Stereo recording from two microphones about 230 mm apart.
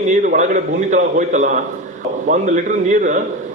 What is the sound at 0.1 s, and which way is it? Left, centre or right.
A man's voice, right.